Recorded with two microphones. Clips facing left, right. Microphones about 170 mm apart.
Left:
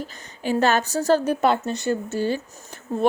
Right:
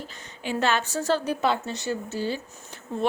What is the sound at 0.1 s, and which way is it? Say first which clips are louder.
A woman's voice: left 6 dB; 40° left (ahead or behind).